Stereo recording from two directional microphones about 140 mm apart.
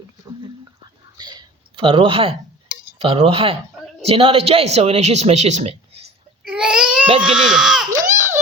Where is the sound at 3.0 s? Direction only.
45° right (ahead or behind).